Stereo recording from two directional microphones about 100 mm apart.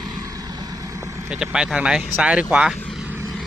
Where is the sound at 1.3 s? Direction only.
5° right (ahead or behind).